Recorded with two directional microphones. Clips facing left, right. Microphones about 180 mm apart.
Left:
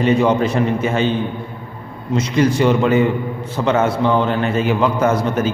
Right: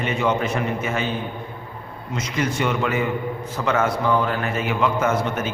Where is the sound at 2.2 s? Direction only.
30° left (ahead or behind).